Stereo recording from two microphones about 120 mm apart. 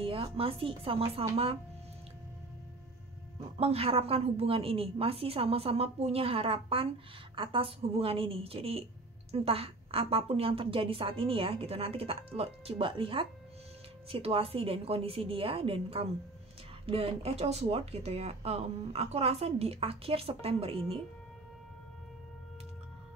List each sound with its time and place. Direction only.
0.0 s a woman's voice: 50° right (ahead or behind)
3.5 s a woman's voice: 55° right (ahead or behind)